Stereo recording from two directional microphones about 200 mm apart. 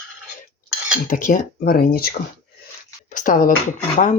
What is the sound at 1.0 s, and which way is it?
Speech, 40° left (ahead or behind).